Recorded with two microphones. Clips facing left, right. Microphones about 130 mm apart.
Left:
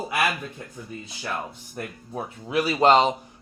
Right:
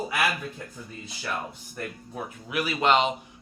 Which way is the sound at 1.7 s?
30° left (ahead or behind).